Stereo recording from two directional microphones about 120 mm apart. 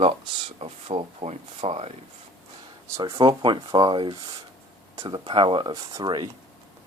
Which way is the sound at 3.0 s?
40° right (ahead or behind).